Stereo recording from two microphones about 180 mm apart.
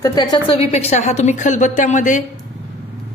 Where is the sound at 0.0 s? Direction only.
25° left (ahead or behind); by 2.2 s 45° left (ahead or behind).